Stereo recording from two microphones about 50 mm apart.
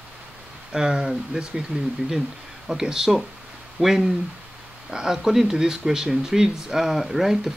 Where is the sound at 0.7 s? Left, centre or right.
Centre.